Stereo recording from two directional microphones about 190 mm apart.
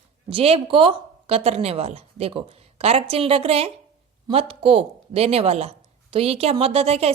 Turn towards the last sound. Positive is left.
turn(degrees=-30)  # may be behind; listen again after turning